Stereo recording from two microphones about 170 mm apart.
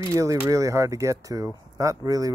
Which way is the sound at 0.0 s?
20° right (ahead or behind).